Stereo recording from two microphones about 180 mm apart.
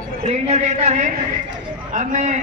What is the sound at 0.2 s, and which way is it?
A man's voice, 35° right (ahead or behind).